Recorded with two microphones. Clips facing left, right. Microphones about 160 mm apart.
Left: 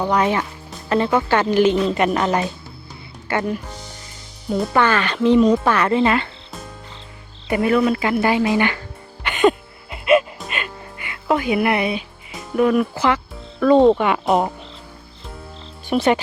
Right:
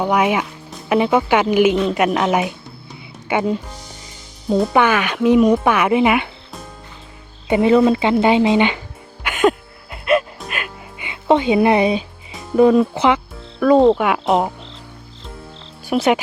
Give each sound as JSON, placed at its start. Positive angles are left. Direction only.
{"t": 0.0, "sound": "speech", "side_deg": -10}
{"t": 3.2, "sound": "speech", "side_deg": -20}
{"t": 4.7, "sound": "speech", "side_deg": -15}
{"t": 7.4, "sound": "speech", "side_deg": -20}
{"t": 9.2, "sound": "music", "side_deg": -5}
{"t": 11.0, "sound": "speech", "side_deg": -25}
{"t": 13.6, "sound": "speech", "side_deg": -5}
{"t": 15.9, "sound": "speech", "side_deg": -10}